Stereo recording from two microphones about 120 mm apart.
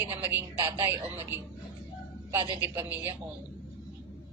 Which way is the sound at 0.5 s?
25° right (ahead or behind).